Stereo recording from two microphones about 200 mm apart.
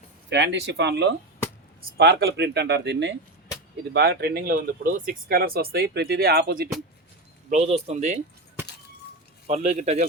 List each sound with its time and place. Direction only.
0.3 s speech: 60° right (ahead or behind)
7.5 s speech: 35° right (ahead or behind)
9.5 s speech: 35° right (ahead or behind)